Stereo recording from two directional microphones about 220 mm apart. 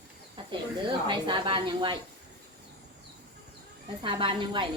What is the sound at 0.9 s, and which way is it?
A woman's voice, 20° right (ahead or behind).